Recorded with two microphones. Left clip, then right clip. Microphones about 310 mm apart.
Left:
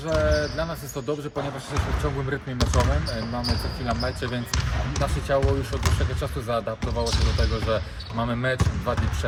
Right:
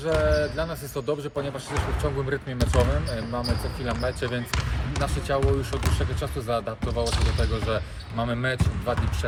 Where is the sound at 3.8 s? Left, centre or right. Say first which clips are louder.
Even; centre.